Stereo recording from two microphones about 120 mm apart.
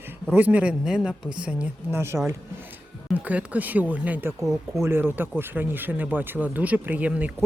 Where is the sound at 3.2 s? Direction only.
10° right (ahead or behind).